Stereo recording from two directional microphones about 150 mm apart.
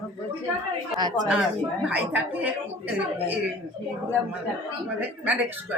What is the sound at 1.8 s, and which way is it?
Speech, 10° right (ahead or behind).